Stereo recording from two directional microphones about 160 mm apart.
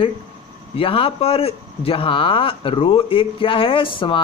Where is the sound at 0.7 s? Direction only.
35° left (ahead or behind).